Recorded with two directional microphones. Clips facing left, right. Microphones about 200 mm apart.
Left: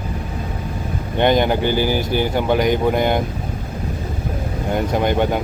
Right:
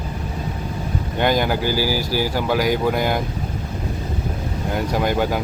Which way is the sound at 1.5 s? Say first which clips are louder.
Left 3 dB; 5° right (ahead or behind).